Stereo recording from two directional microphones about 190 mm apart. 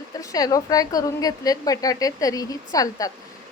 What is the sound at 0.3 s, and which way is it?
A woman's voice, 20° left (ahead or behind).